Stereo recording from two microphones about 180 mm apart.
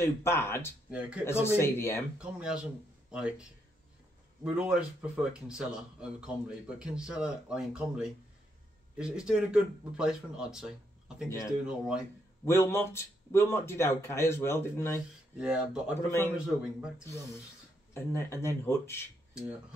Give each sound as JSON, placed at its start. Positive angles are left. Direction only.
{"t": 0.0, "sound": "speech", "side_deg": 15}
{"t": 0.8, "sound": "speech", "side_deg": -5}
{"t": 1.2, "sound": "speech", "side_deg": 15}
{"t": 2.1, "sound": "speech", "side_deg": -5}
{"t": 4.6, "sound": "speech", "side_deg": -5}
{"t": 11.2, "sound": "speech", "side_deg": 15}
{"t": 11.6, "sound": "speech", "side_deg": -5}
{"t": 12.4, "sound": "speech", "side_deg": 15}
{"t": 15.3, "sound": "speech", "side_deg": -5}
{"t": 16.1, "sound": "speech", "side_deg": 15}
{"t": 17.9, "sound": "speech", "side_deg": 15}